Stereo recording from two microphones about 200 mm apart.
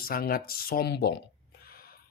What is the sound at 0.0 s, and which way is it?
Speech, 50° left (ahead or behind).